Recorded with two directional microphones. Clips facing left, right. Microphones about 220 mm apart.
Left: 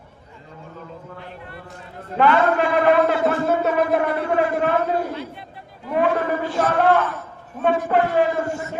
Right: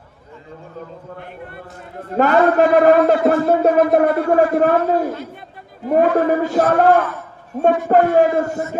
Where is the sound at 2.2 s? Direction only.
45° right (ahead or behind).